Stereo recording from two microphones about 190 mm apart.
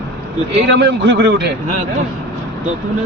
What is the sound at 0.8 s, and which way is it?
Speech, 60° right (ahead or behind).